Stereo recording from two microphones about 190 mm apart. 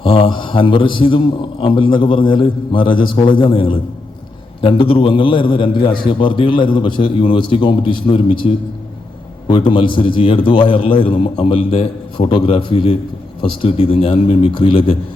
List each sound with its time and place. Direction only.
0.0 s a man's voice: 30° left (ahead or behind)